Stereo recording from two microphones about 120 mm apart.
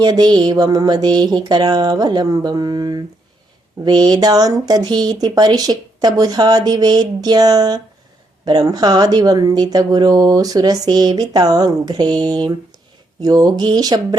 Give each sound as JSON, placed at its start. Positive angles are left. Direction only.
{"t": 0.0, "sound": "speech", "side_deg": -35}